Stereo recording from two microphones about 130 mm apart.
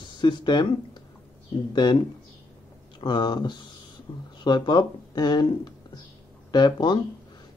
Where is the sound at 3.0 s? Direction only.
35° left (ahead or behind).